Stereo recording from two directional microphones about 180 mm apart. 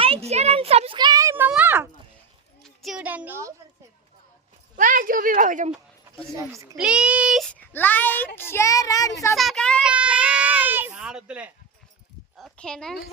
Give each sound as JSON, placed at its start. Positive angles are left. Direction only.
{"t": 0.0, "sound": "a child's voice", "side_deg": -35}
{"t": 2.6, "sound": "a woman's voice", "side_deg": 0}
{"t": 4.8, "sound": "a woman's voice", "side_deg": -50}
{"t": 6.3, "sound": "a child's voice", "side_deg": -20}
{"t": 6.7, "sound": "a child's voice", "side_deg": -5}
{"t": 7.5, "sound": "speech", "side_deg": 10}
{"t": 9.3, "sound": "a child's voice", "side_deg": 0}
{"t": 9.9, "sound": "speech", "side_deg": -5}
{"t": 12.4, "sound": "a sound", "side_deg": 5}